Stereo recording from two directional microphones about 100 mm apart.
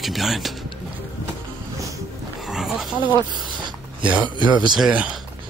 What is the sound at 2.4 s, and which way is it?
Pig, 5° right (ahead or behind).